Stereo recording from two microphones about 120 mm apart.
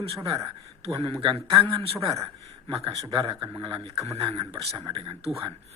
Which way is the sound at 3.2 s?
40° right (ahead or behind).